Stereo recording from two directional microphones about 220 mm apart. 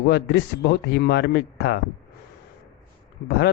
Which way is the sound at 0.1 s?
50° left (ahead or behind).